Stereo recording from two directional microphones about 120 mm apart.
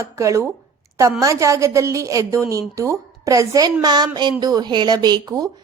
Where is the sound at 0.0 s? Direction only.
25° right (ahead or behind).